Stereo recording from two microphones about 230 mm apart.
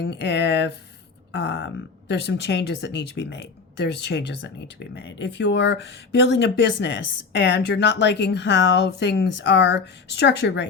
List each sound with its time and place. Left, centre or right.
0.0 s speech: left